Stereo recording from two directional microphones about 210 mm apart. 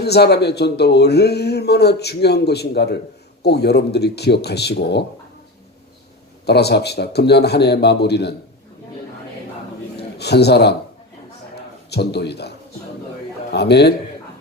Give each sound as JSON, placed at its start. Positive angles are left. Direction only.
{"t": 0.0, "sound": "speech", "side_deg": 50}
{"t": 6.4, "sound": "speech", "side_deg": 50}
{"t": 10.0, "sound": "a man's voice", "side_deg": 50}
{"t": 11.9, "sound": "speech", "side_deg": 50}